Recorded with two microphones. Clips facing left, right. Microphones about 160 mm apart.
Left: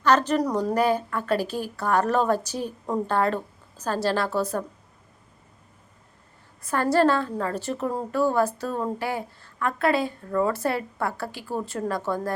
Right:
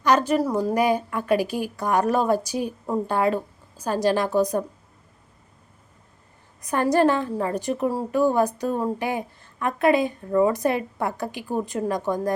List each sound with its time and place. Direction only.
0.0 s a woman's voice: 10° right (ahead or behind)
6.6 s a woman's voice: 15° right (ahead or behind)